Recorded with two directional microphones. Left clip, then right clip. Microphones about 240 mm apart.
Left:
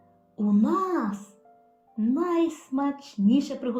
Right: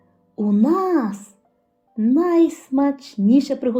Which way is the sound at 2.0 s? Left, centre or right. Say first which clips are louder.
Right 8 dB; centre.